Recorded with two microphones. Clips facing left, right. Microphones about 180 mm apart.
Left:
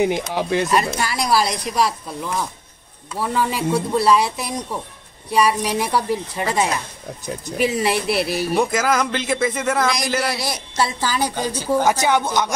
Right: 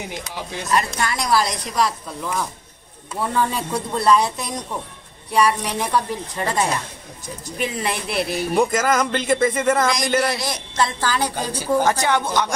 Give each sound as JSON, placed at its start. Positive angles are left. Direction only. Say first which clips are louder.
{"t": 0.0, "sound": "speech", "louder": "left 11 dB", "side_deg": 65}
{"t": 0.8, "sound": "speech", "louder": "left 1 dB", "side_deg": 5}
{"t": 9.8, "sound": "speech", "louder": "right 1 dB", "side_deg": 5}